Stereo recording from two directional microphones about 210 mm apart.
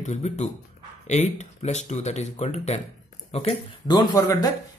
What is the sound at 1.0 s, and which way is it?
Speech, 35° left (ahead or behind).